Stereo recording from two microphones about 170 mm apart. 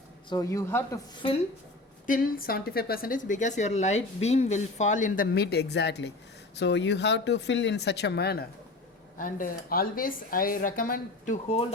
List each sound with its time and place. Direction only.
0.3 s speech: 20° left (ahead or behind)
2.0 s a woman's voice: 55° left (ahead or behind); by 8.4 s 70° left (ahead or behind)
9.1 s speech: 55° left (ahead or behind)
11.4 s speech: 35° left (ahead or behind)